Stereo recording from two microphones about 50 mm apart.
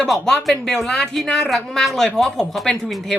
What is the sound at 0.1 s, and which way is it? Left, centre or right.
Speech, centre.